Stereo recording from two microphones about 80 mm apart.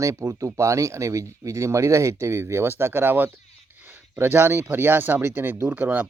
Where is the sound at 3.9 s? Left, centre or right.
Right.